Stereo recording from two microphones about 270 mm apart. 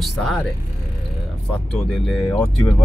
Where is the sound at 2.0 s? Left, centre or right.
Centre.